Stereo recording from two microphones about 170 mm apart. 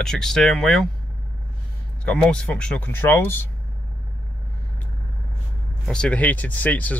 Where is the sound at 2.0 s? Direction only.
5° left (ahead or behind).